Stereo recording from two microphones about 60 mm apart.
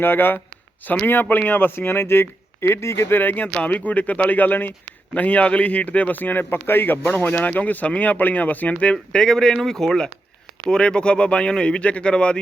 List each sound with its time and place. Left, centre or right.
0.0 s speech: left
3.2 s a man's voice: left; by 12.4 s centre